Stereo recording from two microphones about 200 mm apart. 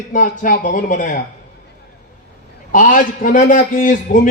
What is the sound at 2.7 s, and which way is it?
Speech, 40° left (ahead or behind).